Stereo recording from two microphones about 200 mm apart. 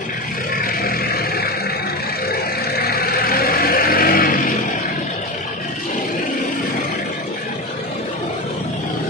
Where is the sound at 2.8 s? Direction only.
50° left (ahead or behind).